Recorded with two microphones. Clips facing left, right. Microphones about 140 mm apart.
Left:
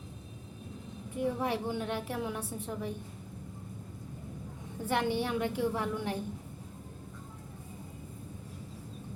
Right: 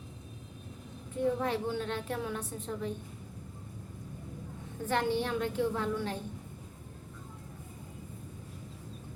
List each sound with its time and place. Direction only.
1.2 s a woman's voice: 15° left (ahead or behind)
4.9 s a woman's voice: 15° left (ahead or behind)